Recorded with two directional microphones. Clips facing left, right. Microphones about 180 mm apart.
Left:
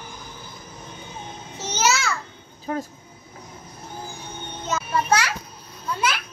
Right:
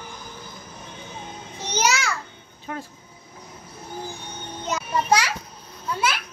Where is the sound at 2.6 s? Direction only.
40° left (ahead or behind).